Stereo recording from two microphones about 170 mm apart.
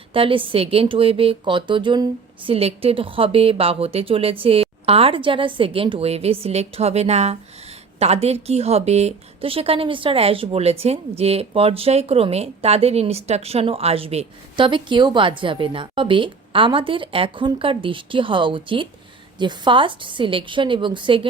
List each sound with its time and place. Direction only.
0.1 s a woman's voice: 30° right (ahead or behind)